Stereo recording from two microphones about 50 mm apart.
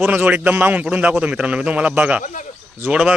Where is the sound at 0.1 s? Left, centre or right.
Right.